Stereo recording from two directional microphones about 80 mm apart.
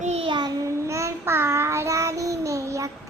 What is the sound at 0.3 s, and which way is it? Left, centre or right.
Child singing, right.